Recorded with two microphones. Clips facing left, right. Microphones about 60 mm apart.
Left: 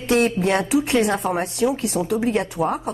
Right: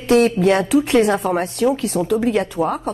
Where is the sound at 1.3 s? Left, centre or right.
Right.